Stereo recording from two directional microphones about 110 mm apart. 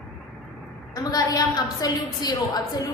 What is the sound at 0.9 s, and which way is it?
A woman's voice, 35° left (ahead or behind).